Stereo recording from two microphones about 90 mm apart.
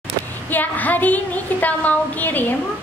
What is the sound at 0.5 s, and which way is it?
A woman's voice, 20° left (ahead or behind).